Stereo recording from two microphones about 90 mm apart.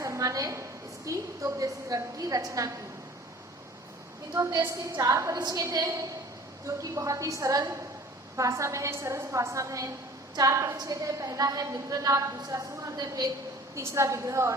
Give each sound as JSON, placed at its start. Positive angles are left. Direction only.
{"t": 0.0, "sound": "a sound", "side_deg": -35}
{"t": 1.0, "sound": "a woman's voice", "side_deg": -35}
{"t": 4.4, "sound": "a woman's voice", "side_deg": -40}
{"t": 13.7, "sound": "a woman's voice", "side_deg": -35}